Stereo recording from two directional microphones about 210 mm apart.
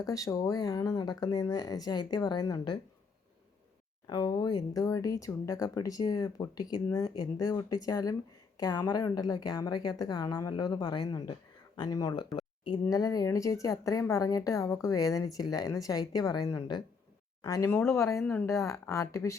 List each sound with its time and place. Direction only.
0.0 s a woman's voice: 15° left (ahead or behind)
4.0 s a woman's voice: 20° left (ahead or behind)
12.4 s a sound: 20° left (ahead or behind)
12.8 s speech: 15° left (ahead or behind)